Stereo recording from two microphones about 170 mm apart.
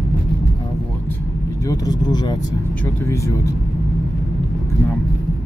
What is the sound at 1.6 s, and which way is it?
Speech, 20° left (ahead or behind).